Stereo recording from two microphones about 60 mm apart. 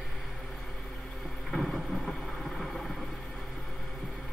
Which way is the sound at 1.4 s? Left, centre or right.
Centre.